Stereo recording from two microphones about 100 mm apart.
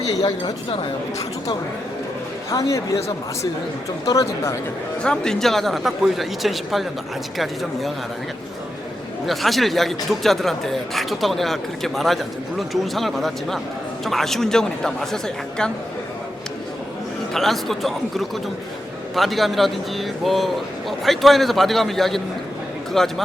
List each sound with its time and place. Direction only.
0.2 s speech: 40° left (ahead or behind)
2.5 s speech: 35° left (ahead or behind)
4.0 s speech: 35° left (ahead or behind)
5.0 s speech: 5° left (ahead or behind)
9.2 s speech: centre (ahead or behind)
17.3 s speech: 5° left (ahead or behind)